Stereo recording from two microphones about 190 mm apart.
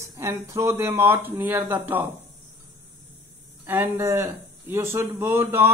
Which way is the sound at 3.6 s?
10° right (ahead or behind).